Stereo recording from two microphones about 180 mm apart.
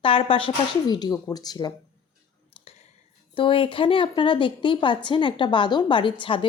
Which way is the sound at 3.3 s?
30° left (ahead or behind).